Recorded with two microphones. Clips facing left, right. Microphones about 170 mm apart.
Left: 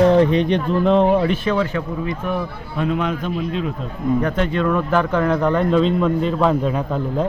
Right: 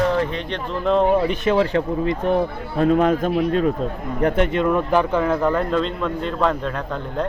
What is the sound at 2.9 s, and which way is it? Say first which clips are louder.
Speech: right 6 dB; 45° right (ahead or behind).